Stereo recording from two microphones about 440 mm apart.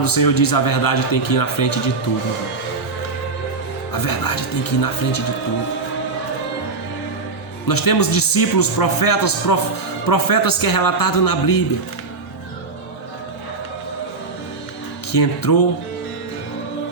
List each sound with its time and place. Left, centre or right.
0.0 s a man's voice: left
4.0 s a man's voice: left
7.7 s a man's voice: left
15.1 s a man's voice: left